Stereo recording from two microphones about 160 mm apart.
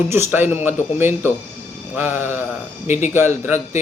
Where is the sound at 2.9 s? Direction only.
45° left (ahead or behind).